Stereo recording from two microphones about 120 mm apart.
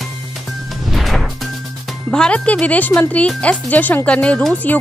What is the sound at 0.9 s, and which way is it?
Music, centre (ahead or behind).